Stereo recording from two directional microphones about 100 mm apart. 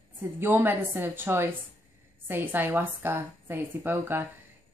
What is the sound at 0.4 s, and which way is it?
A woman's voice, 20° right (ahead or behind).